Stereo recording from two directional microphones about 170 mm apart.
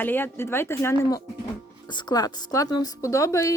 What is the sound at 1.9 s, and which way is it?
A woman's voice, 25° left (ahead or behind).